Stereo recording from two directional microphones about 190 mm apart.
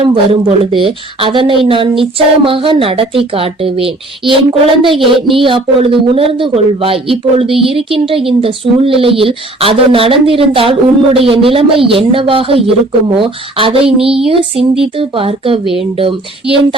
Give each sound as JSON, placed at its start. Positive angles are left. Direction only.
{"t": 0.0, "sound": "speech", "side_deg": -30}
{"t": 15.6, "sound": "speech", "side_deg": 0}
{"t": 16.0, "sound": "speech", "side_deg": -30}